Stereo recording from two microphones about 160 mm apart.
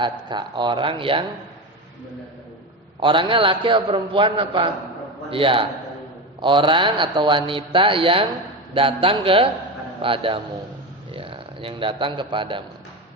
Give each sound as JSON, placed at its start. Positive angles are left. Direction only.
{"t": 0.0, "sound": "speech", "side_deg": -30}
{"t": 3.0, "sound": "a man's voice", "side_deg": -30}